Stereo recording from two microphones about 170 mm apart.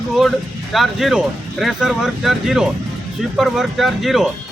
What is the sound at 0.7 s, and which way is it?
Speech, centre (ahead or behind).